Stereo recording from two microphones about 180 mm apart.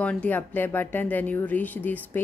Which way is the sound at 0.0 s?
5° left (ahead or behind).